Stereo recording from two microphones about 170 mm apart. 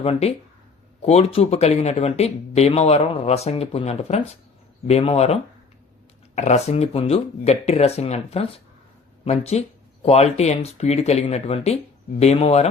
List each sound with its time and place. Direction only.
0.0 s speech: 35° left (ahead or behind)